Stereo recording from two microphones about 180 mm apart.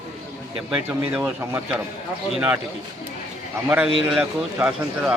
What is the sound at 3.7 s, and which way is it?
A man's voice, 5° right (ahead or behind).